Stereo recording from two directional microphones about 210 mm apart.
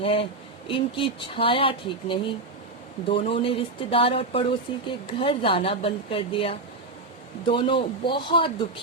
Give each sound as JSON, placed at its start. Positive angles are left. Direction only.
{"t": 0.0, "sound": "a woman's voice", "side_deg": 25}